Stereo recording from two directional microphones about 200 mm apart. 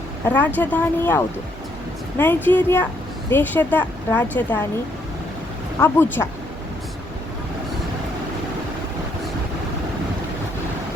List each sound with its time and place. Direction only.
0.3 s speech: 10° left (ahead or behind)
5.8 s speech: 10° left (ahead or behind)